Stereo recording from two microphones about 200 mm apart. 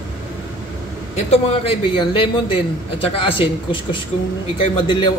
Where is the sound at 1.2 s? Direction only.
25° left (ahead or behind).